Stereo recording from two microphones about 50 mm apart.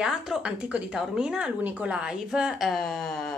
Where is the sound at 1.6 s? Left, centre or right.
Right.